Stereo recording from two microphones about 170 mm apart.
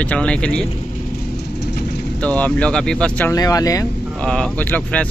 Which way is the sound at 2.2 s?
10° left (ahead or behind).